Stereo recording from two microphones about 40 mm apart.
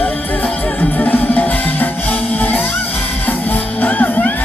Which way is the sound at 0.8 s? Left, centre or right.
Left.